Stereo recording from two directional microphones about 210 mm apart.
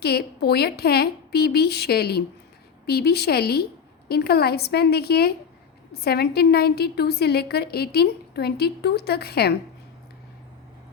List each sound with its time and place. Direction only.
0.0 s a woman's voice: 50° left (ahead or behind)